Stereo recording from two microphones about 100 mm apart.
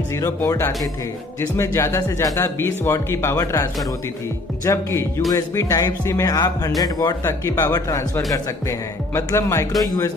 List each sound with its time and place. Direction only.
0.2 s speech: 25° left (ahead or behind)
4.7 s speech: 30° left (ahead or behind)
7.2 s speech: 25° left (ahead or behind)